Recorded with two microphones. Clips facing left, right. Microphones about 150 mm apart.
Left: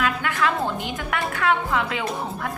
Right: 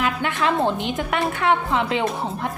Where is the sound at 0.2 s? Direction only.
20° right (ahead or behind).